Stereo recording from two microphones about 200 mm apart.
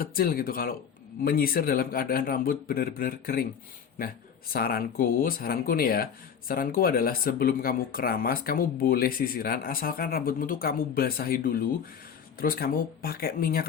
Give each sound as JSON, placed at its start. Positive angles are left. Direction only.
{"t": 0.0, "sound": "speech", "side_deg": 45}
{"t": 4.5, "sound": "speech", "side_deg": 45}